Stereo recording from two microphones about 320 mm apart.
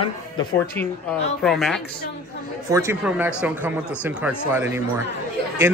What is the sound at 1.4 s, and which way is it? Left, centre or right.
A man's voice, centre.